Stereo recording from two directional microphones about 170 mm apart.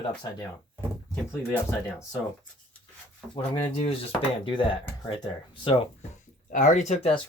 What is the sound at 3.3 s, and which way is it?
Speech, 30° left (ahead or behind).